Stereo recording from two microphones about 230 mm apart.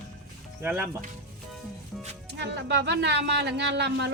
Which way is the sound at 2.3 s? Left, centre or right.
Right.